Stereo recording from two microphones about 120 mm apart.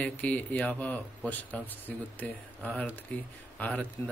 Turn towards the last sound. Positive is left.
turn(degrees=15)  # may be behind; listen again after turning